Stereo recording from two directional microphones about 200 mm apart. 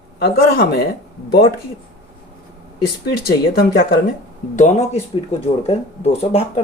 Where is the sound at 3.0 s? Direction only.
50° left (ahead or behind).